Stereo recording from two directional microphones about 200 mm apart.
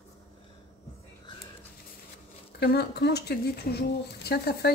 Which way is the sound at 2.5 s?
55° left (ahead or behind).